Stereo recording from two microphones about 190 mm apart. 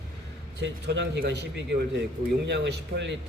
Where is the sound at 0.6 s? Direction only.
65° right (ahead or behind).